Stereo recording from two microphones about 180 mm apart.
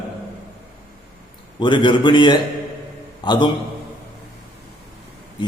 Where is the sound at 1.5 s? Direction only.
25° left (ahead or behind).